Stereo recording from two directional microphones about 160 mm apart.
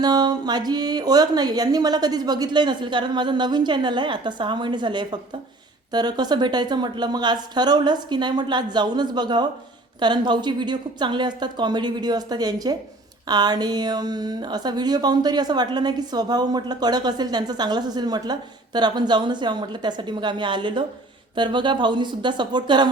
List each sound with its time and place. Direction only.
0.0 s a woman's voice: 25° right (ahead or behind)